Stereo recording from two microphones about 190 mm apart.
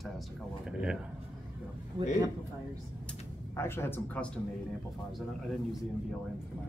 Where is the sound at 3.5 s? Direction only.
15° left (ahead or behind).